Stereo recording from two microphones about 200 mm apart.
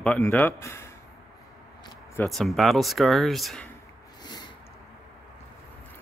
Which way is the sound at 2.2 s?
Centre (ahead or behind).